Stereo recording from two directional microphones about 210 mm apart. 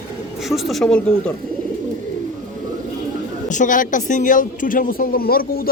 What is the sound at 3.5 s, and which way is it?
A man's voice, 40° left (ahead or behind).